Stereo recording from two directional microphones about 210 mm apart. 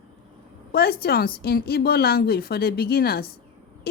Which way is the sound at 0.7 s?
45° left (ahead or behind).